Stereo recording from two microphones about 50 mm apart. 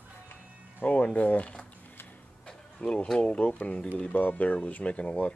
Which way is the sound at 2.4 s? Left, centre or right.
Centre.